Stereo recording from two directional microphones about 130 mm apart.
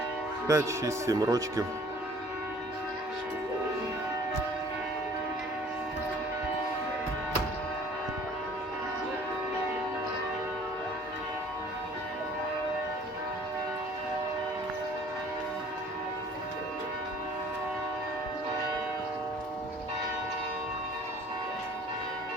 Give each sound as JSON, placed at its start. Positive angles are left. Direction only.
{"t": 0.4, "sound": "speech", "side_deg": -20}